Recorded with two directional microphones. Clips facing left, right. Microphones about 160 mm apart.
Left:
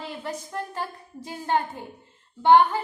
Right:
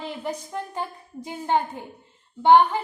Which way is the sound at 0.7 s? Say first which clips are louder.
Right 1 dB; 15° right (ahead or behind).